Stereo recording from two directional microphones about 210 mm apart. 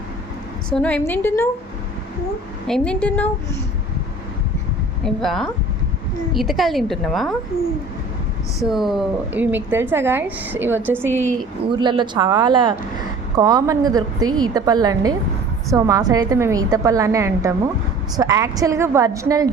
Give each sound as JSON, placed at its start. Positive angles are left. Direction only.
{"t": 0.7, "sound": "a woman's voice", "side_deg": 5}
{"t": 2.6, "sound": "a woman's voice", "side_deg": 5}
{"t": 5.0, "sound": "a woman's voice", "side_deg": 0}
{"t": 8.7, "sound": "a woman's voice", "side_deg": 0}
{"t": 11.6, "sound": "a woman's voice", "side_deg": -20}